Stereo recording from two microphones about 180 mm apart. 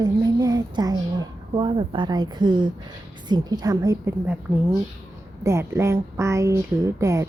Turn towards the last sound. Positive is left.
turn(degrees=-15)  # may be behind; listen again after turning